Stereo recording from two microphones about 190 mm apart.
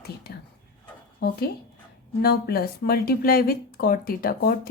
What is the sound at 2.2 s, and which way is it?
Speech, 55° left (ahead or behind).